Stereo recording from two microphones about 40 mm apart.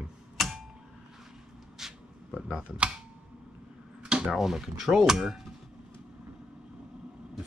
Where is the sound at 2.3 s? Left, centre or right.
Right.